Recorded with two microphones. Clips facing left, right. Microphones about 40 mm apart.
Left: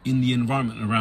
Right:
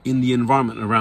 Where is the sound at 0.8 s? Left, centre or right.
Right.